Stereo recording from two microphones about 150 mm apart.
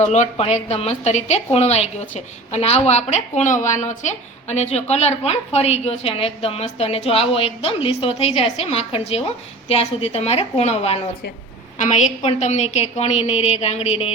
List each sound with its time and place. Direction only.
0.0 s a woman's voice: 50° left (ahead or behind)